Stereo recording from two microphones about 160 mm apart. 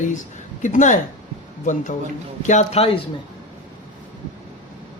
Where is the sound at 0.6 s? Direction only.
50° left (ahead or behind).